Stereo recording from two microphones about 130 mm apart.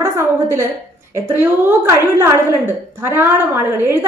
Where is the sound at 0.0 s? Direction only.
20° right (ahead or behind).